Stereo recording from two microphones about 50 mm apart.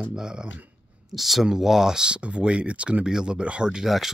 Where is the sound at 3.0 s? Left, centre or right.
Centre.